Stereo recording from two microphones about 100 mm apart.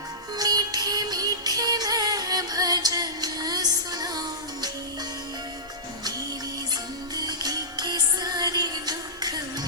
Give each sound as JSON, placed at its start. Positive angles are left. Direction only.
{"t": 0.3, "sound": "music", "side_deg": -40}
{"t": 7.2, "sound": "music", "side_deg": -40}